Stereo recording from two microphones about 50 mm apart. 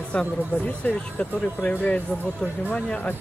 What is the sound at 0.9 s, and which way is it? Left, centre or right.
Speech, left.